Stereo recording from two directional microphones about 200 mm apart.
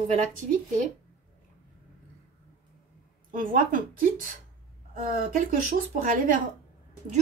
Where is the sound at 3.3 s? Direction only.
45° right (ahead or behind).